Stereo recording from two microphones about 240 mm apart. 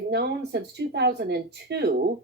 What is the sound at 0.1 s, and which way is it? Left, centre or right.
Speech, right.